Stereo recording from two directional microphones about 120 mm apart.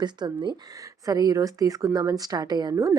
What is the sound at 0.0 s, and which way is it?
Speech, 40° right (ahead or behind).